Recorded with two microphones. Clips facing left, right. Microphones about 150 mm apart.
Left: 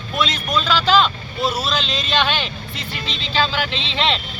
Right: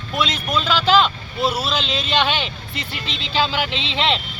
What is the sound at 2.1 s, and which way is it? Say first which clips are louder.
Speech: even; 15° right (ahead or behind).